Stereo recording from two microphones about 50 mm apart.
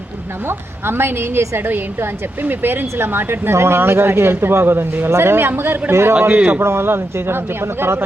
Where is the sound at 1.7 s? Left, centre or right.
Right.